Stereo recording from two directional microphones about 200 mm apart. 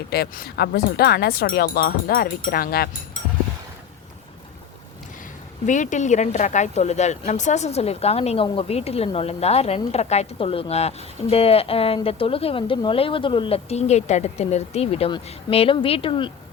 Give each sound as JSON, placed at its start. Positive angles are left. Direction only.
{"t": 0.1, "sound": "speech", "side_deg": 50}
{"t": 5.6, "sound": "speech", "side_deg": 40}